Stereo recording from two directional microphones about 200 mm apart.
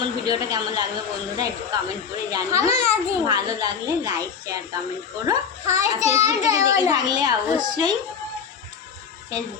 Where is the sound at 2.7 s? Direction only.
30° left (ahead or behind).